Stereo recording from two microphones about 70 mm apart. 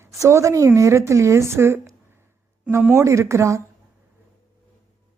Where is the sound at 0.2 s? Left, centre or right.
Right.